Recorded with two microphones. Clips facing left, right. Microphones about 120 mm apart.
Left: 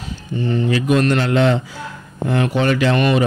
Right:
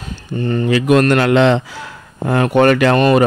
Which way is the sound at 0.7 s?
80° right.